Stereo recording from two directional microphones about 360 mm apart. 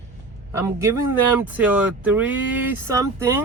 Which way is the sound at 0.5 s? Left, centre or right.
Centre.